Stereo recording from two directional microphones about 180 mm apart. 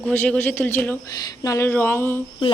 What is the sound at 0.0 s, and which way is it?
Speech, 10° left (ahead or behind).